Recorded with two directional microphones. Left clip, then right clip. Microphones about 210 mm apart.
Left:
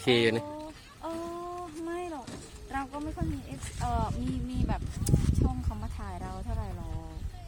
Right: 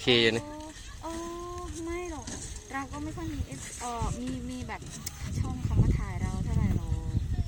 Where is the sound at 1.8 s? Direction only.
15° left (ahead or behind).